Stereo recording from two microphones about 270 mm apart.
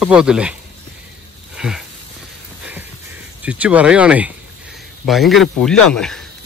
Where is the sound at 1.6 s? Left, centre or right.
Centre.